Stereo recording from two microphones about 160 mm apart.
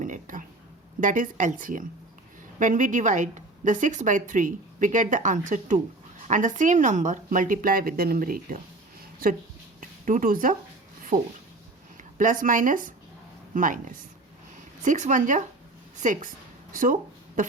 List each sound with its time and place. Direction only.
0.0 s a woman's voice: 55° right (ahead or behind)
10.1 s a woman's voice: 60° right (ahead or behind)
16.7 s a sound: 55° right (ahead or behind)